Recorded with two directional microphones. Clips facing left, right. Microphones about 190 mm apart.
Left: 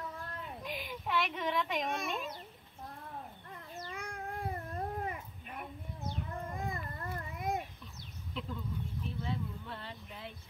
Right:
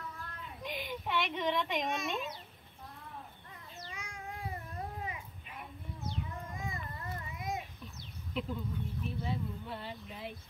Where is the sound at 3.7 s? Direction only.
55° left (ahead or behind).